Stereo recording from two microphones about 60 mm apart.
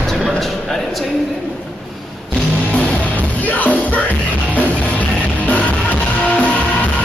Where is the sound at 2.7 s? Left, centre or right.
Left.